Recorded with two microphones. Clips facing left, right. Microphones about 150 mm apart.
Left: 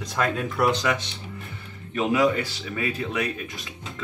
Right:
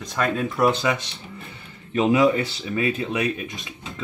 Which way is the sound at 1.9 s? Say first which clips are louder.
Right 4 dB; 25° right (ahead or behind).